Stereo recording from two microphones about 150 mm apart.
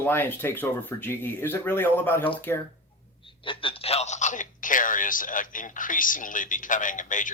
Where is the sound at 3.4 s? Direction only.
35° left (ahead or behind).